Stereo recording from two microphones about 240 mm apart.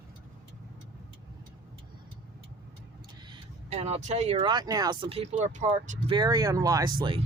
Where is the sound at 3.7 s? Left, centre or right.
Right.